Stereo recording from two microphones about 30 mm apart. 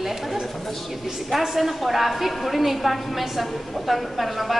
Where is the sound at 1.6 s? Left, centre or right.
Centre.